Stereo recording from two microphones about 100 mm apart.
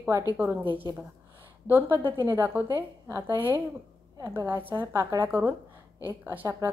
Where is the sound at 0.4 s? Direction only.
20° right (ahead or behind).